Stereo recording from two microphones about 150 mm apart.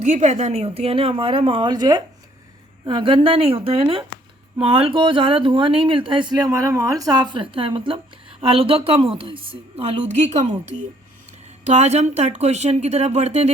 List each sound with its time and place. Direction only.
0.0 s speech: 50° right (ahead or behind)
10.1 s speech: 50° right (ahead or behind)